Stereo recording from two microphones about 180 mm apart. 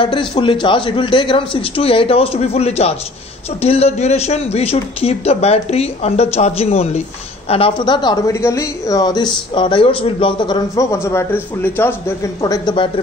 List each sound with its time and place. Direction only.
0.0 s a woman's voice: 30° left (ahead or behind)